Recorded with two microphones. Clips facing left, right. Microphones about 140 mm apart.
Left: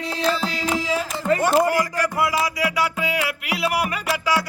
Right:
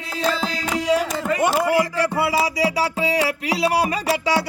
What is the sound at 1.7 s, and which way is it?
Music, 25° right (ahead or behind).